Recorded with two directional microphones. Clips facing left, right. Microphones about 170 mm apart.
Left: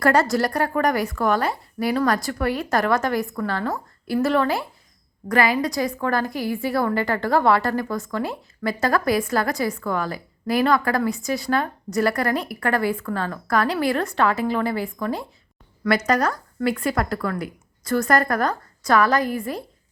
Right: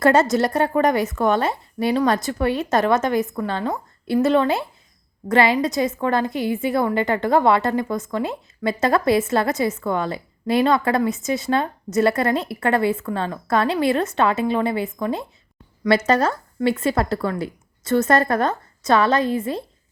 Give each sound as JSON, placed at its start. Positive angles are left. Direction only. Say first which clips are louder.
{"t": 0.0, "sound": "a woman's voice", "louder": "right 3 dB", "side_deg": -20}